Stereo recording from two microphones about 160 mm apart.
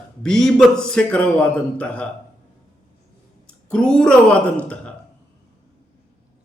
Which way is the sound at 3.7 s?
5° left (ahead or behind).